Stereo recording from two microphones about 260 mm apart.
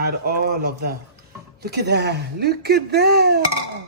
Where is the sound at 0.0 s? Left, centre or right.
Right.